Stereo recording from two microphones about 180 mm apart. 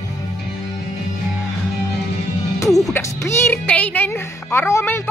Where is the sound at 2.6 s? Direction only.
20° left (ahead or behind).